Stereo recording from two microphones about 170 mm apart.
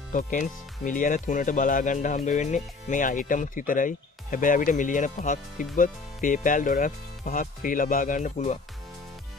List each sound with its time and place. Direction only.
0.1 s speech: 50° left (ahead or behind)